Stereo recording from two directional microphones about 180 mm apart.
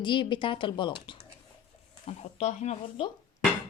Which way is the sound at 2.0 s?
35° left (ahead or behind).